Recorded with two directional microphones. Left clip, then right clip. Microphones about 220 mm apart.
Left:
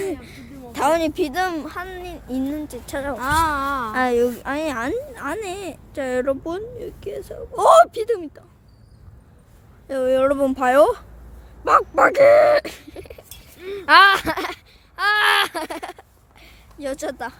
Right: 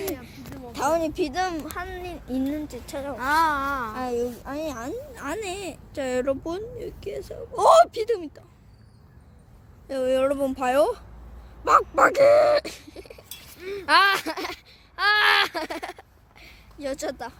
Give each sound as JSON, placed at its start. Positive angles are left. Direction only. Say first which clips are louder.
{"t": 0.2, "sound": "a sound", "louder": "left 1 dB", "side_deg": 25}
{"t": 1.2, "sound": "speech", "louder": "left 4 dB", "side_deg": 15}
{"t": 1.7, "sound": "speech", "louder": "left 2 dB", "side_deg": 0}
{"t": 2.8, "sound": "a woman's voice", "louder": "left 4 dB", "side_deg": 20}
{"t": 5.1, "sound": "speech", "louder": "left 4 dB", "side_deg": 5}
{"t": 9.8, "sound": "speech", "louder": "left 5 dB", "side_deg": 10}
{"t": 11.6, "sound": "speech", "louder": "left 3 dB", "side_deg": 5}
{"t": 14.9, "sound": "speech", "louder": "left 2 dB", "side_deg": 0}